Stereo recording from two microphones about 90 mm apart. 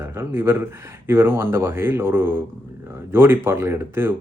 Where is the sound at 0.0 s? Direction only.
25° right (ahead or behind).